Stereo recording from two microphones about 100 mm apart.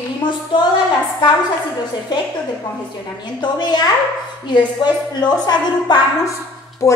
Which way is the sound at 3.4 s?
45° left (ahead or behind).